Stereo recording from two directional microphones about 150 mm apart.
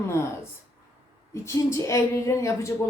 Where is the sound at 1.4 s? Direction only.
20° left (ahead or behind).